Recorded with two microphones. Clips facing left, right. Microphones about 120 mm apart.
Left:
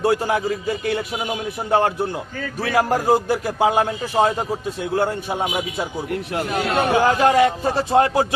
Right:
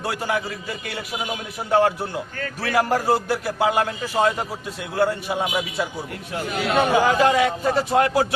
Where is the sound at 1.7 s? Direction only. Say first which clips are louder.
Even; 20° left (ahead or behind).